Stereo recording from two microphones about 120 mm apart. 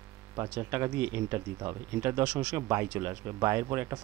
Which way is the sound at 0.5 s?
20° right (ahead or behind).